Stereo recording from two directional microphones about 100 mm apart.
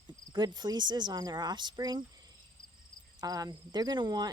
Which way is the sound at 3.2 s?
40° right (ahead or behind).